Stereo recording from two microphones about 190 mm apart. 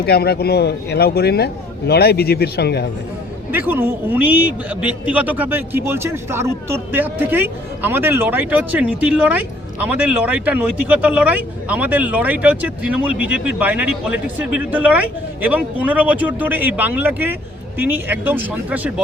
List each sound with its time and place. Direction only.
0.0 s speech: 55° left (ahead or behind)
3.5 s speech: 10° right (ahead or behind)